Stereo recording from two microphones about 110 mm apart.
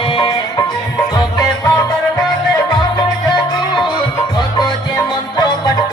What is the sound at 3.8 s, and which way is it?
Music, 45° left (ahead or behind).